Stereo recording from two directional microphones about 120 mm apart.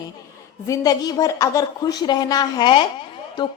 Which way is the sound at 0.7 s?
30° left (ahead or behind).